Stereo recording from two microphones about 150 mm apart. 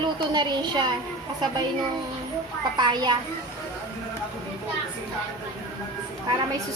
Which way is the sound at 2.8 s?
30° right (ahead or behind).